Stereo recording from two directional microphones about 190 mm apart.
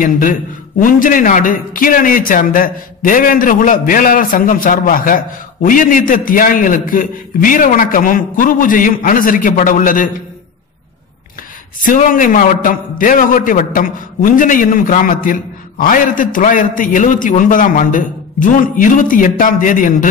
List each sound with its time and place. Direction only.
0.0 s a man's voice: 45° left (ahead or behind)
11.8 s a man's voice: 45° left (ahead or behind)